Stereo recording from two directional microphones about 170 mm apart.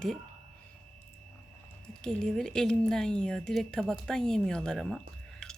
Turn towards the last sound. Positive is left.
turn(degrees=5)  # may be behind; listen again after turning